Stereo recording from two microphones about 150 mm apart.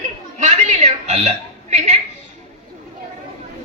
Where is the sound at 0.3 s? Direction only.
55° right (ahead or behind).